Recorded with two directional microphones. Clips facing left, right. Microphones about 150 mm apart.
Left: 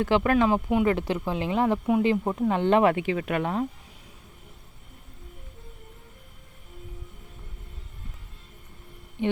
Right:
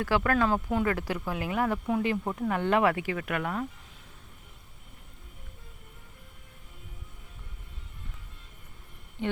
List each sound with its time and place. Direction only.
0.0 s speech: 20° left (ahead or behind)
9.2 s speech: 15° left (ahead or behind)